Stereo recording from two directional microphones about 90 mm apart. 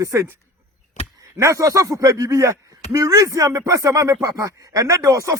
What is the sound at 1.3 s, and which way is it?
Speech, 35° right (ahead or behind).